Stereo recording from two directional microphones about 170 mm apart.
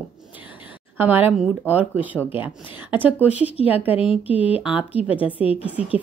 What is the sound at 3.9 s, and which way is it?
Speech, 35° left (ahead or behind).